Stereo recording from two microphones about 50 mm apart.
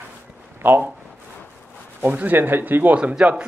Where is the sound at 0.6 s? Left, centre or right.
Right.